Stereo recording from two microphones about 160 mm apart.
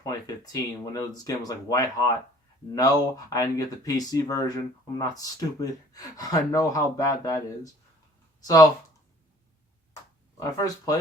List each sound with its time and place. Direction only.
0.0 s speech: 20° left (ahead or behind)
10.4 s speech: 20° left (ahead or behind)